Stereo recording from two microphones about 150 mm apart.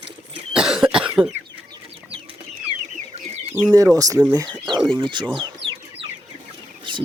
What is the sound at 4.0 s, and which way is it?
Speech, 25° right (ahead or behind).